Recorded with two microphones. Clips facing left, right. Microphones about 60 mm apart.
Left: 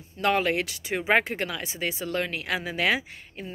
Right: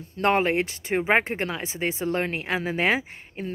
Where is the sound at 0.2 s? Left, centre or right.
Right.